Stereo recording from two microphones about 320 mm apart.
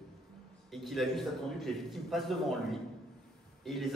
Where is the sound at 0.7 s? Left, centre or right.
Centre.